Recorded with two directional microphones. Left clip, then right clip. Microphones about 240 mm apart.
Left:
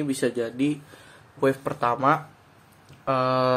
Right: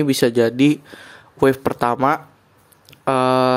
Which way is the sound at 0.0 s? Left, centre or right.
Right.